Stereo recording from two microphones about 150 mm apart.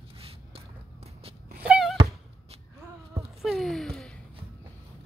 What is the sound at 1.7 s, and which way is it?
Wail, 5° right (ahead or behind).